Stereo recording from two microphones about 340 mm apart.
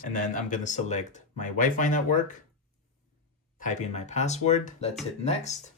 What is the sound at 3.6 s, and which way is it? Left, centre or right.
Speech, left.